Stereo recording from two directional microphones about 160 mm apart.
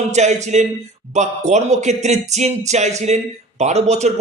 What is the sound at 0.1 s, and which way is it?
Speech, 45° right (ahead or behind).